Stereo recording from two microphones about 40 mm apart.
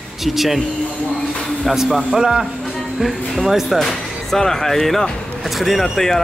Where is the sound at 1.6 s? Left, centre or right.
Centre.